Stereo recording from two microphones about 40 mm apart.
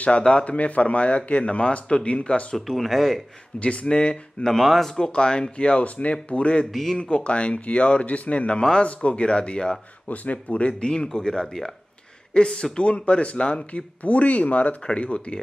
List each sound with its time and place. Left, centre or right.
0.2 s speech: left
0.5 s speech: left
2.5 s speech: centre
3.5 s speech: left
4.5 s speech: centre
4.9 s speech: centre
5.9 s speech: left
6.7 s speech: centre
7.0 s speech: left
10.0 s speech: left
11.1 s speech: centre; by 14.8 s left
14.8 s speech: left